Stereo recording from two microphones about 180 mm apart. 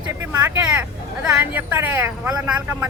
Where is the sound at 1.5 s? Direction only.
10° right (ahead or behind).